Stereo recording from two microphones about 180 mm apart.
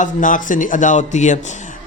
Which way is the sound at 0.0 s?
45° left (ahead or behind).